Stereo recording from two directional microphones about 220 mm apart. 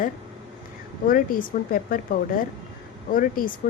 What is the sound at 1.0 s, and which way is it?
Speech, 40° left (ahead or behind).